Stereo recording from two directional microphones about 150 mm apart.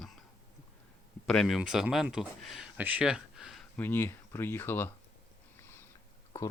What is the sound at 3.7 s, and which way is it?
Speech, 15° left (ahead or behind).